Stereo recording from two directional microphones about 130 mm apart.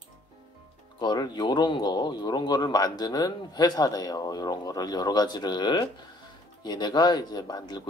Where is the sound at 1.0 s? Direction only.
35° left (ahead or behind).